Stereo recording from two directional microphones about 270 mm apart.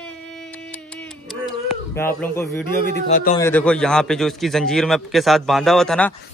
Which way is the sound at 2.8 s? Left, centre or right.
Left.